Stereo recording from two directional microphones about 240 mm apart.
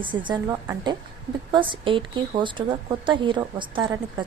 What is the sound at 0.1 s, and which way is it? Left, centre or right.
A woman's voice, centre.